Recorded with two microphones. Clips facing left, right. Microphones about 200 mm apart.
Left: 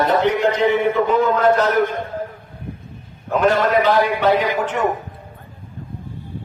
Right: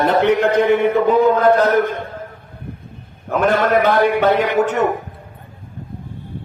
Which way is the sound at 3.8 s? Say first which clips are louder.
Right 2 dB; 50° right (ahead or behind).